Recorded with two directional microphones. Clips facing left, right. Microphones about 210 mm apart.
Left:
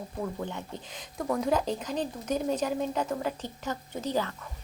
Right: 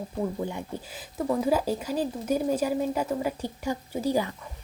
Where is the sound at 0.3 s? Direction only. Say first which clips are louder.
Right 4 dB; 10° right (ahead or behind).